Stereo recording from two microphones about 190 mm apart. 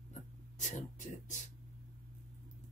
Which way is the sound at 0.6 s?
40° left (ahead or behind).